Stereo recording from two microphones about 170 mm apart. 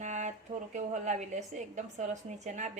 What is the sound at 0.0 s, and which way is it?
A woman's voice, 45° right (ahead or behind).